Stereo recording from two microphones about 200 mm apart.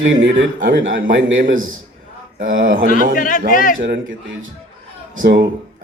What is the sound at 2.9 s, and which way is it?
Speech, 40° left (ahead or behind).